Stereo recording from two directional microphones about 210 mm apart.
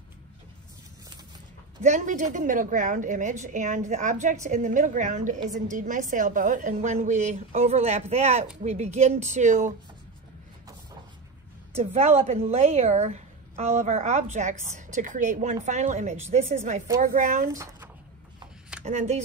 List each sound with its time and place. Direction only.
1.8 s a woman's voice: 35° right (ahead or behind)
11.7 s a woman's voice: 30° right (ahead or behind)
17.5 s speech: 15° right (ahead or behind)
18.9 s a woman's voice: 30° right (ahead or behind)